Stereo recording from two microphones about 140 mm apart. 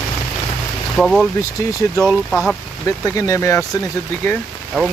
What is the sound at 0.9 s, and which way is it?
Speech, centre (ahead or behind).